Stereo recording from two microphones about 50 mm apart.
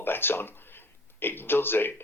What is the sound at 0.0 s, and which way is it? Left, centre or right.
Speech, left.